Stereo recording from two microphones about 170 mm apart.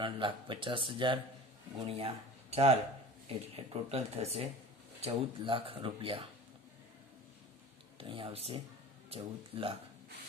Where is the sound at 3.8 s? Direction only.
35° right (ahead or behind).